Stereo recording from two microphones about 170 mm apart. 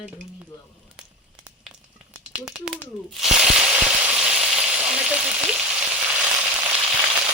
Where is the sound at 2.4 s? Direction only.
Centre (ahead or behind).